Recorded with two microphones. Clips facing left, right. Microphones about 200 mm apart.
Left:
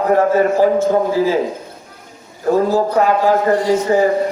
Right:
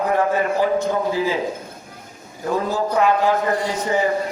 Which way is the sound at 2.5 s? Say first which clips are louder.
Left 7 dB; 35° left (ahead or behind).